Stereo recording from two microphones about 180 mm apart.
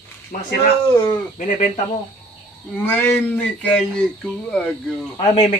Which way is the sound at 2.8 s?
10° left (ahead or behind).